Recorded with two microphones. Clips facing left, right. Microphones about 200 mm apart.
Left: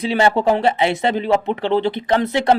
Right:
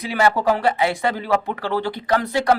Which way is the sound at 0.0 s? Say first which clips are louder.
Left 3 dB; 25° left (ahead or behind).